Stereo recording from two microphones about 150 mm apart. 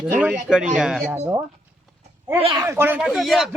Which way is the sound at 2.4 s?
35° right (ahead or behind).